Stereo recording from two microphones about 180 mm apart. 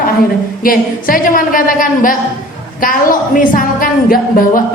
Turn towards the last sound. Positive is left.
turn(degrees=50)  # may be behind; listen again after turning